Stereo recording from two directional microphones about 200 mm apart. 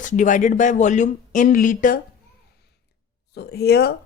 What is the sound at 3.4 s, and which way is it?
Speech, 55° left (ahead or behind).